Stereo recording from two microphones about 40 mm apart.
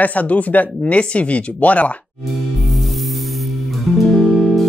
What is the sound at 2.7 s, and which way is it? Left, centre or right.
Music, centre.